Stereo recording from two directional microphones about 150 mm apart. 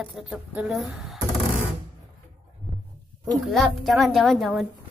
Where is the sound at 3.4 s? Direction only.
Centre (ahead or behind).